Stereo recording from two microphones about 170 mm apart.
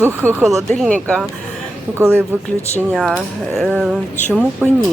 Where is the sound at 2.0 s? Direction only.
15° right (ahead or behind).